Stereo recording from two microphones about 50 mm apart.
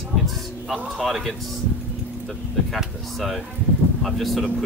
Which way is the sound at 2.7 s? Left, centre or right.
Centre.